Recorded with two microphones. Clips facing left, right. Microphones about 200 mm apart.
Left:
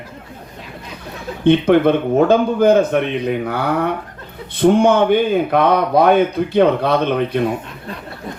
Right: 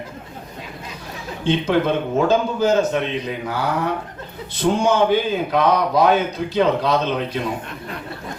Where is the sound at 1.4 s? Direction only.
60° left (ahead or behind).